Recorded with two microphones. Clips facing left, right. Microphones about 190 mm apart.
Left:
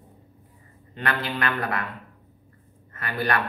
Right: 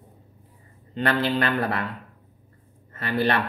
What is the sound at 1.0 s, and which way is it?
Speech, 30° right (ahead or behind).